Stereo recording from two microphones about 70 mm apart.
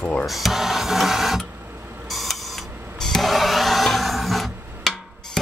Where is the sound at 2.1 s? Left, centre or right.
Centre.